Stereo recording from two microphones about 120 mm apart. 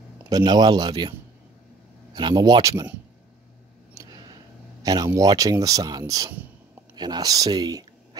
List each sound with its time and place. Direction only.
0.3 s speech: 35° right (ahead or behind)
2.1 s speech: 35° right (ahead or behind)
3.9 s a sound: 30° right (ahead or behind)
4.8 s speech: 30° right (ahead or behind)